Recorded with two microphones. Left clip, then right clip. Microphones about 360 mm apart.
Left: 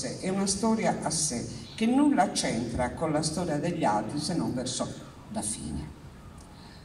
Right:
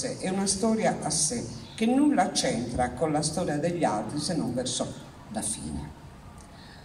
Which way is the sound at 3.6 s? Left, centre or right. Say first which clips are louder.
Left 1 dB; centre.